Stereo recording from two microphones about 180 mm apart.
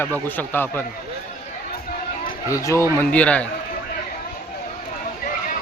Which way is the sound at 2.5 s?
15° left (ahead or behind).